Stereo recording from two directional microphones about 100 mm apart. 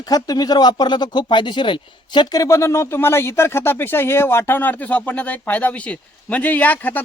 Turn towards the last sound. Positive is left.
turn(degrees=20)  # may be behind; listen again after turning